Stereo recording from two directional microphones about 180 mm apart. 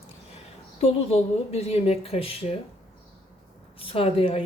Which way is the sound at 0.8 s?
35° left (ahead or behind).